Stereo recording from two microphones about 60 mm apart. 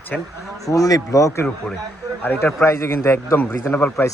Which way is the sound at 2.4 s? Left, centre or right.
Left.